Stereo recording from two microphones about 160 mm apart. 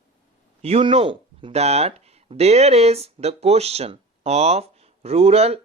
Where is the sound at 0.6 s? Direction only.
35° right (ahead or behind).